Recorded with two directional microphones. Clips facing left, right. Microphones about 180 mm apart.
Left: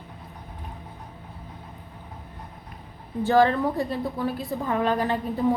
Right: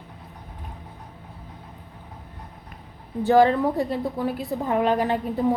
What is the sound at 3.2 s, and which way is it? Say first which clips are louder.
A woman's voice: right 2 dB; 15° right (ahead or behind).